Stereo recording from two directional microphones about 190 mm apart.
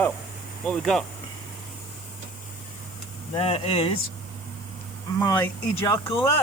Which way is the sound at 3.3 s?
30° left (ahead or behind).